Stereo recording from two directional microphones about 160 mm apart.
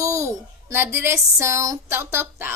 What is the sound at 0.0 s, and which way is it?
A child's voice, 20° right (ahead or behind).